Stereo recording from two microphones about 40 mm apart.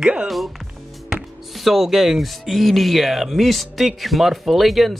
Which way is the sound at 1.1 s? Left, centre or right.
Centre.